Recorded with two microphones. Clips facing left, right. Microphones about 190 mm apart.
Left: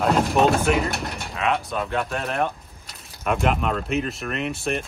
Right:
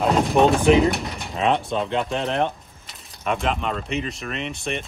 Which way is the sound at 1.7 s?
25° right (ahead or behind).